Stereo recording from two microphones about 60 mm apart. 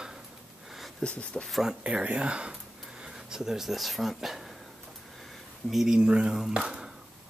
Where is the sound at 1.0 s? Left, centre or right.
Centre.